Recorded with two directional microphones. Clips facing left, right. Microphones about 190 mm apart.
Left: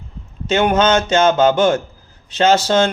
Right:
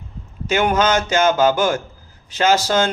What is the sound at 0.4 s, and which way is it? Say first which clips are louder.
Speech: left 3 dB; 25° left (ahead or behind).